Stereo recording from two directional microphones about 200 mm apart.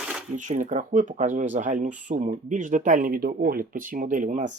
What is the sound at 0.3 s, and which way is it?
Speech, 40° right (ahead or behind).